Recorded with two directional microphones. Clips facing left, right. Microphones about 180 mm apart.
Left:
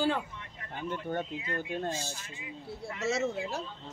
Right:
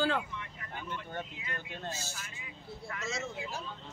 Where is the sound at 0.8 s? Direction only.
40° left (ahead or behind).